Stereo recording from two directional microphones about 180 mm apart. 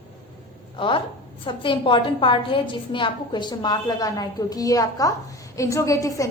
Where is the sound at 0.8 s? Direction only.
30° left (ahead or behind).